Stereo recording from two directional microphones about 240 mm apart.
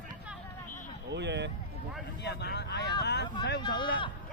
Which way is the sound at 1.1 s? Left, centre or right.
Right.